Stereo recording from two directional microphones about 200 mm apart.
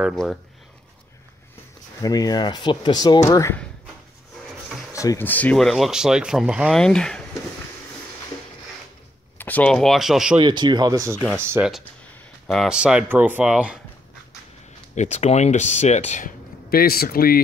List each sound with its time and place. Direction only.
0.0 s speech: centre (ahead or behind)
2.0 s speech: 20° left (ahead or behind)
4.9 s speech: 15° left (ahead or behind)
9.4 s speech: 5° left (ahead or behind)
10.3 s speech: 25° right (ahead or behind)
12.4 s speech: centre (ahead or behind)
15.0 s speech: 35° left (ahead or behind)
16.7 s speech: 50° left (ahead or behind)